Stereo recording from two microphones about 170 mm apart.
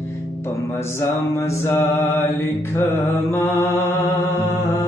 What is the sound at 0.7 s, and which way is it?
Mantra, 15° left (ahead or behind).